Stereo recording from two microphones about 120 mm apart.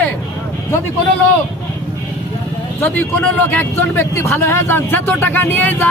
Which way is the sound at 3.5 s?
15° left (ahead or behind).